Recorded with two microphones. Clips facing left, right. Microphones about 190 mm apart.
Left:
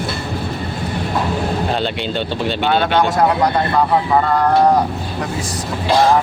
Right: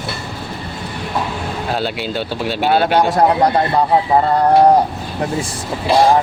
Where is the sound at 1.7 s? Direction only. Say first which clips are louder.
Left 1 dB; 5° right (ahead or behind).